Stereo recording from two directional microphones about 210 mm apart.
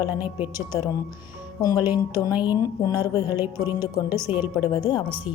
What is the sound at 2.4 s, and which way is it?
Speech, 20° left (ahead or behind).